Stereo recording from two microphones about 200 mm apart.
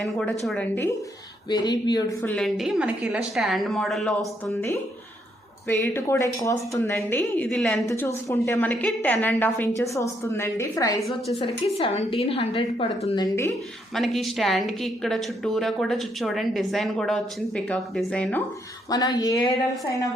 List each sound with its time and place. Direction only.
0.0 s a woman's voice: centre (ahead or behind)
1.5 s a woman's voice: 20° left (ahead or behind)
2.2 s a woman's voice: 5° left (ahead or behind)
5.6 s a woman's voice: 15° left (ahead or behind)
7.9 s a woman's voice: 15° left (ahead or behind)
11.4 s a woman's voice: 25° left (ahead or behind)
13.9 s a woman's voice: centre (ahead or behind)
18.9 s a woman's voice: 20° left (ahead or behind)